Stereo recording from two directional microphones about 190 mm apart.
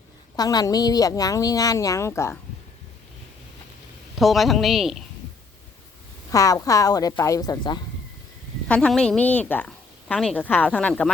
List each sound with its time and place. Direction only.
0.3 s speech: 20° left (ahead or behind)
4.2 s a woman's voice: centre (ahead or behind)
6.3 s a woman's voice: 20° left (ahead or behind)
8.6 s a woman's voice: 5° left (ahead or behind)